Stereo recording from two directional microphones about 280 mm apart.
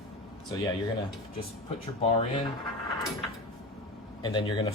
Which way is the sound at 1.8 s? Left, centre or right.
Left.